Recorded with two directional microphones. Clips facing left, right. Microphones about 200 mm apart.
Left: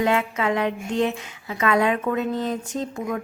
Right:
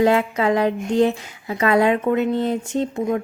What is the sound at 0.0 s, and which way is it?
Speech, 35° right (ahead or behind).